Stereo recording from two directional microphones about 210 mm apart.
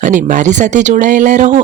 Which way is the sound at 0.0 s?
35° right (ahead or behind).